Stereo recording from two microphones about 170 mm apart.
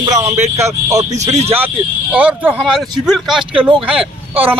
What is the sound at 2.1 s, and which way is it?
A man's voice, 10° right (ahead or behind).